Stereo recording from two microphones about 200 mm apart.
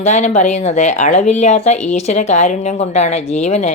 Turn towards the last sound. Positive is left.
turn(degrees=35)  # may be behind; listen again after turning